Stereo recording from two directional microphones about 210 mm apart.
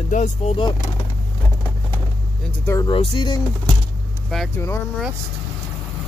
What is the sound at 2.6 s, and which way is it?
Speech, 15° left (ahead or behind).